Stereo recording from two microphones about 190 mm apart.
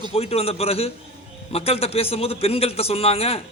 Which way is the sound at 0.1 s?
30° left (ahead or behind).